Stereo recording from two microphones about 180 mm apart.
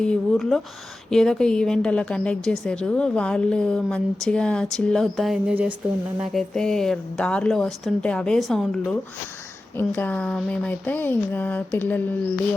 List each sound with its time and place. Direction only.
0.0 s a woman's voice: centre (ahead or behind)